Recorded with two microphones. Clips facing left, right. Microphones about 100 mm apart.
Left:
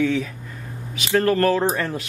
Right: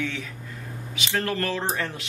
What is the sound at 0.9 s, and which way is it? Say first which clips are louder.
Speech: left 8 dB; 45° left (ahead or behind).